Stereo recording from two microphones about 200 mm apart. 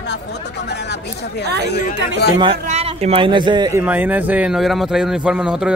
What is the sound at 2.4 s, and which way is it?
A man's voice, 30° right (ahead or behind).